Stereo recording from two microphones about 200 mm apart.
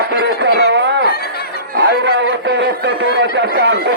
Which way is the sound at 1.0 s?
50° left (ahead or behind).